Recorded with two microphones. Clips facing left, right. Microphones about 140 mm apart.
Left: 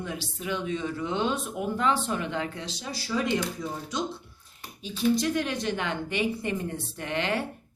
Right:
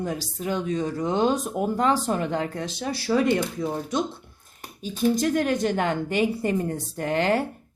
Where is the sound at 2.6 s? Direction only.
55° right (ahead or behind).